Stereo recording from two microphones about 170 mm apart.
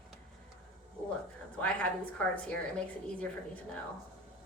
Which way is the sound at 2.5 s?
5° left (ahead or behind).